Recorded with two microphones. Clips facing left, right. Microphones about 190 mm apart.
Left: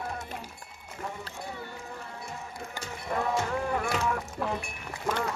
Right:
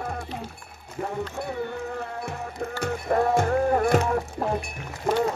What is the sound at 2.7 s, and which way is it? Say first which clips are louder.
Music: right 9 dB; 55° right (ahead or behind).